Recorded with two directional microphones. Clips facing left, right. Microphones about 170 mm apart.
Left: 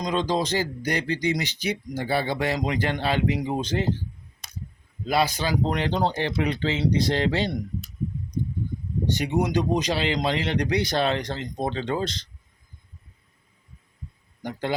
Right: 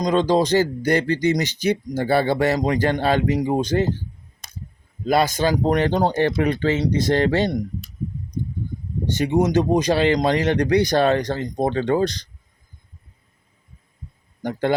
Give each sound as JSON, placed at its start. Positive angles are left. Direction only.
{"t": 0.0, "sound": "speech", "side_deg": -45}
{"t": 5.0, "sound": "speech", "side_deg": -45}
{"t": 9.1, "sound": "speech", "side_deg": -45}
{"t": 14.4, "sound": "speech", "side_deg": -55}